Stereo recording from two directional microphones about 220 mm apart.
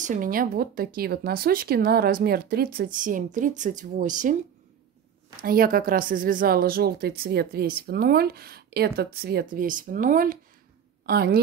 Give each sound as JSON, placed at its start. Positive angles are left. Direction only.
{"t": 0.0, "sound": "speech", "side_deg": -35}
{"t": 5.4, "sound": "a woman's voice", "side_deg": -40}